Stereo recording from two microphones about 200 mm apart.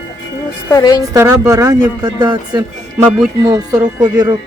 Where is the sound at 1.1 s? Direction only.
15° right (ahead or behind).